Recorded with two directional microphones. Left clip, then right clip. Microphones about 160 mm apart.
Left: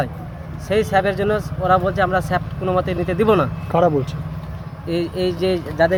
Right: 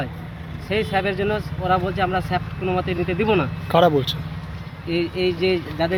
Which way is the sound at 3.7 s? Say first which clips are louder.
Right 1 dB; 5° right (ahead or behind).